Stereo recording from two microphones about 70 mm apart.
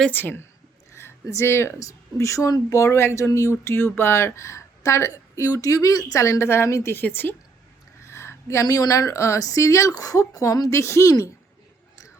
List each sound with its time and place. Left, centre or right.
0.1 s a woman's voice: left
1.3 s speech: left
1.8 s speech: left
6.9 s a woman's voice: left
8.1 s a sound: left
8.6 s speech: left